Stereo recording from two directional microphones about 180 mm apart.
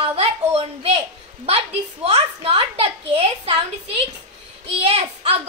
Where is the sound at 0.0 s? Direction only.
35° right (ahead or behind).